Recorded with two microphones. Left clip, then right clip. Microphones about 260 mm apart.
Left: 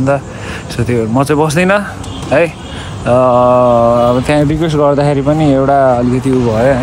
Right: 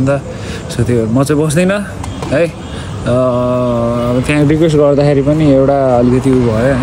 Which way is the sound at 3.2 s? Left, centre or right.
Left.